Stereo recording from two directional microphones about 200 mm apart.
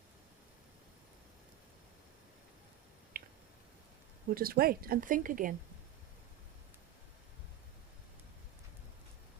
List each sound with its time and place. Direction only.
3.1 s finger snapping: 45° right (ahead or behind)
4.3 s speech: 45° right (ahead or behind)